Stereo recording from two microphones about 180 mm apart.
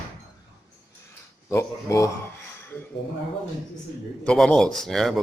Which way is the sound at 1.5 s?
15° left (ahead or behind).